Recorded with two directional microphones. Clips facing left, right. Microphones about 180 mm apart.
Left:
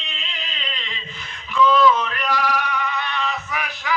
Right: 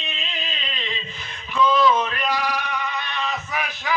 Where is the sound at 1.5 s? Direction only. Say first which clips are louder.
Left 2 dB; 20° right (ahead or behind).